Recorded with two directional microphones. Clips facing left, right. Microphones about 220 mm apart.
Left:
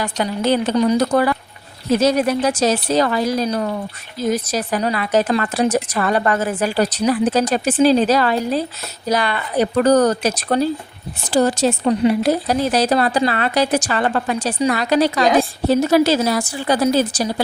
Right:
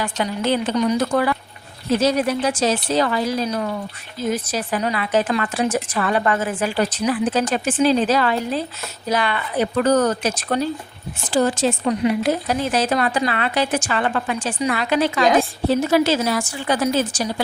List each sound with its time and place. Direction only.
0.0 s speech: 40° left (ahead or behind)
15.2 s a woman's voice: centre (ahead or behind)
15.7 s speech: 40° left (ahead or behind)